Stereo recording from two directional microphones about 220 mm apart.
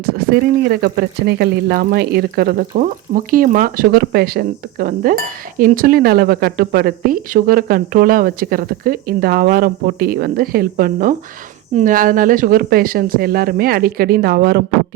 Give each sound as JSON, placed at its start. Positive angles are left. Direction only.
{"t": 0.0, "sound": "speech", "side_deg": -45}